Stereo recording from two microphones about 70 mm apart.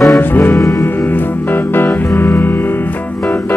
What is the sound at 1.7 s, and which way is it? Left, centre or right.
Music, left.